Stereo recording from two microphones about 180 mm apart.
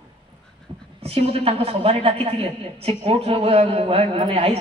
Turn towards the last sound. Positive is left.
turn(degrees=-35)  # may be behind; listen again after turning